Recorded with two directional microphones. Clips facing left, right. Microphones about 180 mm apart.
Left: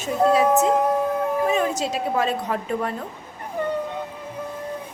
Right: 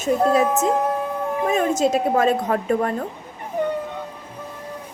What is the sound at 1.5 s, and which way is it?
A woman's voice, 45° right (ahead or behind).